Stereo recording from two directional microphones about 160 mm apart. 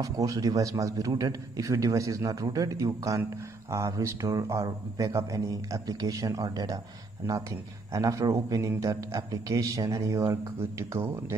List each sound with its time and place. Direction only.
0.0 s a man's voice: 20° right (ahead or behind)
7.9 s a man's voice: 20° right (ahead or behind)